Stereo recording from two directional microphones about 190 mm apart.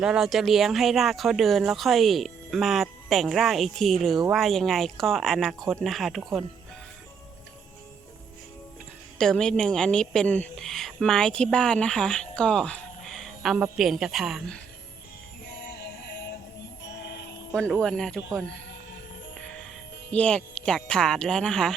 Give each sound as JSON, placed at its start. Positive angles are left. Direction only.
{"t": 0.0, "sound": "speech", "side_deg": -5}
{"t": 9.1, "sound": "speech", "side_deg": 5}
{"t": 15.4, "sound": "synthetic singing", "side_deg": 60}
{"t": 16.8, "sound": "music", "side_deg": 65}
{"t": 17.5, "sound": "speech", "side_deg": 5}
{"t": 20.1, "sound": "speech", "side_deg": 5}